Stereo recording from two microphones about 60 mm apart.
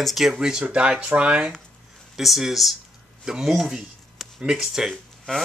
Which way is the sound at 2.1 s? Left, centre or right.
Centre.